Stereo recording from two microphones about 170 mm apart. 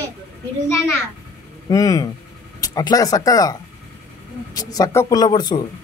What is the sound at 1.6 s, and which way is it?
Speech, 20° left (ahead or behind).